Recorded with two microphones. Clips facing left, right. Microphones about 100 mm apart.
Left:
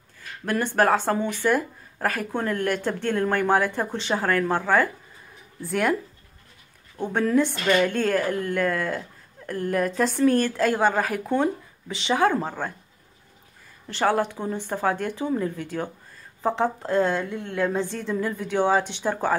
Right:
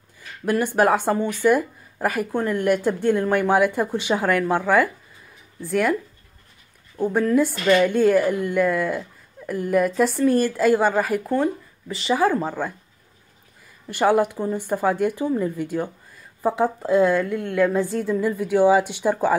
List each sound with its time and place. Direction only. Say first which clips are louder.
0.5 s a woman's voice: right 2 dB; 15° right (ahead or behind)
5.6 s a woman's voice: right 2 dB; centre (ahead or behind)
7.0 s a woman's voice: right 3 dB; 5° right (ahead or behind)
13.8 s a woman's voice: right 4 dB; 10° right (ahead or behind)
17.3 s a woman's voice: right 6 dB; 55° right (ahead or behind)
17.8 s a woman's voice: right 5 dB; 5° right (ahead or behind)